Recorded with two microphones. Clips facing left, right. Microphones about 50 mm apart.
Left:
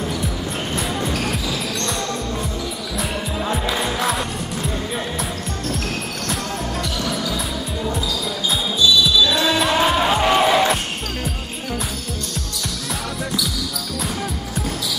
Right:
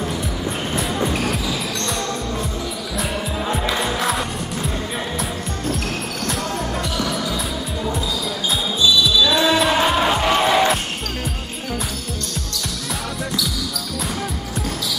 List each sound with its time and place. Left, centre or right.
0.7 s music: centre
3.0 s music: centre
9.2 s music: centre